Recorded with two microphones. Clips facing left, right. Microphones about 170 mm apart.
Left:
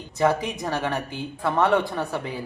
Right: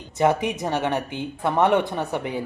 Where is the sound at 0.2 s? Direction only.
20° right (ahead or behind).